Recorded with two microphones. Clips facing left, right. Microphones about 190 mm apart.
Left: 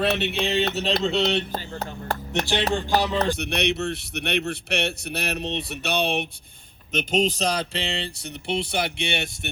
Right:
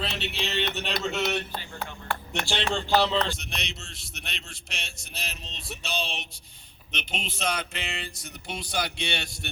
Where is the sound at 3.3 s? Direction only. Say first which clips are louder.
Left 14 dB; 65° left (ahead or behind).